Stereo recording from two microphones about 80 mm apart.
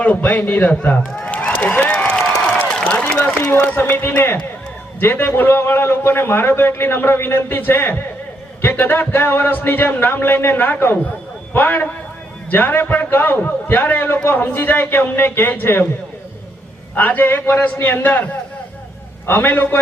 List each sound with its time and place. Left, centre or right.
0.0 s a man's voice: centre
2.8 s a sound: centre
3.7 s a man's voice: centre
16.9 s a man's voice: left